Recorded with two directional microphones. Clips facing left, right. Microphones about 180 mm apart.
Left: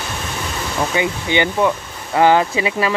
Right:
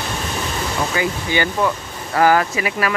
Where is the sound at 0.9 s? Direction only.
20° left (ahead or behind).